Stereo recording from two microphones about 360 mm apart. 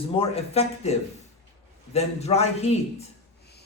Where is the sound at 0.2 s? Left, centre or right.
Centre.